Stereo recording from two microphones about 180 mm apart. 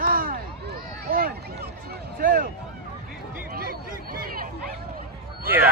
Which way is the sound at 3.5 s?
55° right (ahead or behind).